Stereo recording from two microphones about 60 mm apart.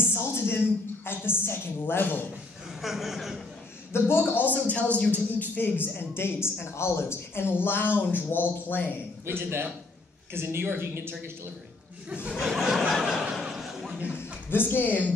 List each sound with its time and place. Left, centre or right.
0.0 s a sound: left
1.0 s a man's voice: left
2.8 s speech: centre
3.9 s speech: left
4.4 s a man's voice: left
9.2 s speech: right
12.1 s speech: centre
12.4 s speech: centre
14.1 s a woman's voice: left